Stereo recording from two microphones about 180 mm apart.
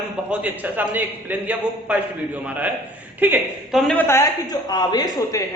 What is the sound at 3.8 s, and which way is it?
A man's voice, 5° left (ahead or behind).